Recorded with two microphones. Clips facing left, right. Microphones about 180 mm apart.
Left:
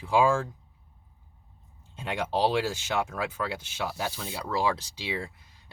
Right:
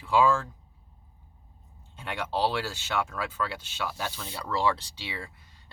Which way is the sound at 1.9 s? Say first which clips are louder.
Left 3 dB; 20° left (ahead or behind).